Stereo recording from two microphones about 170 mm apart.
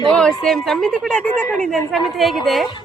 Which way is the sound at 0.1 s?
5° left (ahead or behind).